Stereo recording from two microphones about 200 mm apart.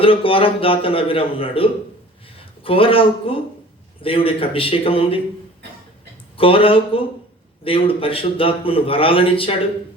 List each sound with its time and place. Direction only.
0.0 s a man's voice: 25° left (ahead or behind)
6.3 s a man's voice: 25° left (ahead or behind)